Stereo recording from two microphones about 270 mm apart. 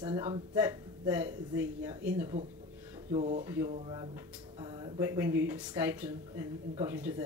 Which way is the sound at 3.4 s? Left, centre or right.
Centre.